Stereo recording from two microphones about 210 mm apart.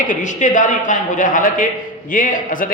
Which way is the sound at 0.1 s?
35° left (ahead or behind).